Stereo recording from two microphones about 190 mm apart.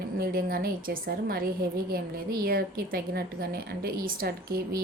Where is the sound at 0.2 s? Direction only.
50° right (ahead or behind).